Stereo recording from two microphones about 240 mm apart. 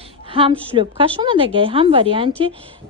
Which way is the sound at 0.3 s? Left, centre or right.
Right.